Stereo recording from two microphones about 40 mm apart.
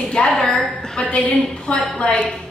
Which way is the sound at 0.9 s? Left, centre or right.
Left.